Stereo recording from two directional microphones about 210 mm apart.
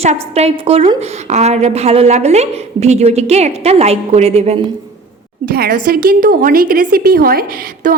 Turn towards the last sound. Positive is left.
turn(degrees=-45)  # may be behind; listen again after turning